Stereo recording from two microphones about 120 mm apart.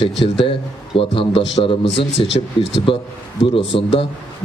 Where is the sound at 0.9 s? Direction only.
50° left (ahead or behind).